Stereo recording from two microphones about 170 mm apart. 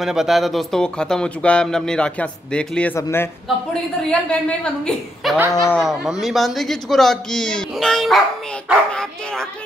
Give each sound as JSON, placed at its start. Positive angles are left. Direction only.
{"t": 0.0, "sound": "speech", "side_deg": 0}
{"t": 5.5, "sound": "speech", "side_deg": 20}
{"t": 5.8, "sound": "speech", "side_deg": 0}